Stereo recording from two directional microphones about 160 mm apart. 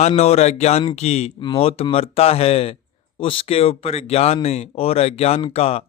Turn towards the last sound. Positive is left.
turn(degrees=40)  # may be behind; listen again after turning